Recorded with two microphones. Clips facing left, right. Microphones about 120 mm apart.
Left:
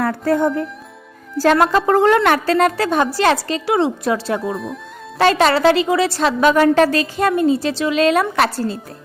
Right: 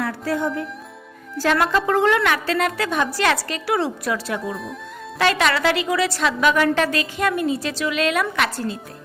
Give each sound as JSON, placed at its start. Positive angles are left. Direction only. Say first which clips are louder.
{"t": 0.0, "sound": "a woman's voice", "louder": "left 6 dB", "side_deg": 50}
{"t": 4.5, "sound": "speech", "louder": "left 5 dB", "side_deg": 0}
{"t": 5.1, "sound": "a woman's voice", "louder": "left 5 dB", "side_deg": 35}